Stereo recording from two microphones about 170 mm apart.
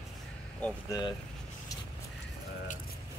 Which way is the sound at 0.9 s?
25° left (ahead or behind).